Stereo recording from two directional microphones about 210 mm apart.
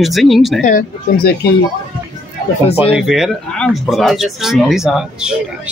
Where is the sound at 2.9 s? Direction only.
Centre (ahead or behind).